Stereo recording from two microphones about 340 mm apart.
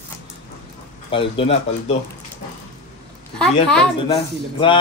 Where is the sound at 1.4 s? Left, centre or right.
Centre.